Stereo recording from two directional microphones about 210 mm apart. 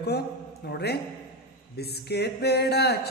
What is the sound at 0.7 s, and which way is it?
Speech, 50° left (ahead or behind).